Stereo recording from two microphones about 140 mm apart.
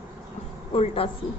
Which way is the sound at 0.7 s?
40° left (ahead or behind).